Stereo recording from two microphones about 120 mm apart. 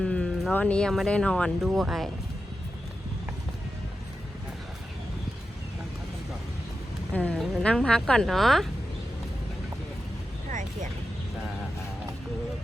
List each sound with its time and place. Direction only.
0.0 s a sound: 10° left (ahead or behind)
0.5 s speech: 10° left (ahead or behind)
7.1 s speech: 10° left (ahead or behind)
7.3 s a woman's voice: centre (ahead or behind)
7.6 s speech: 10° left (ahead or behind)
10.5 s a sound: 90° right